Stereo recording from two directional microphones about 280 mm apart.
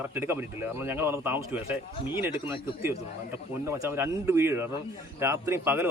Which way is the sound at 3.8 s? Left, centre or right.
Centre.